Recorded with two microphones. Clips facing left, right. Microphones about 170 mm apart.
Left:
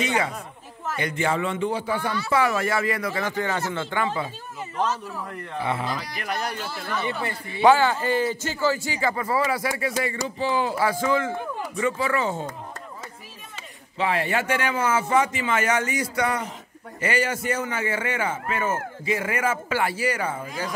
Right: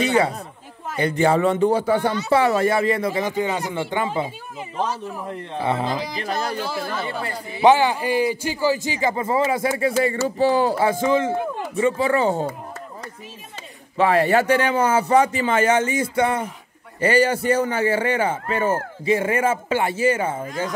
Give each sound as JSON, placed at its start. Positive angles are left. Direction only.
{"t": 0.0, "sound": "a man's voice", "side_deg": -35}
{"t": 2.0, "sound": "speech", "side_deg": -20}
{"t": 7.6, "sound": "a man's voice", "side_deg": -15}
{"t": 10.2, "sound": "a man's voice", "side_deg": -40}
{"t": 10.8, "sound": "speech", "side_deg": -20}
{"t": 13.9, "sound": "a man's voice", "side_deg": -45}